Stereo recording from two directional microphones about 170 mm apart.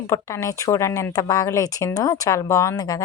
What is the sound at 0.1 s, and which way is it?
Speech, 20° left (ahead or behind).